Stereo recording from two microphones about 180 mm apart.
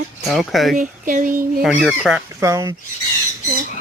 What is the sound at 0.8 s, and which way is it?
Speech, 45° right (ahead or behind).